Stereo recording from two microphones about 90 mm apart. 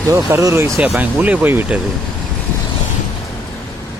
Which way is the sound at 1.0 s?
20° right (ahead or behind).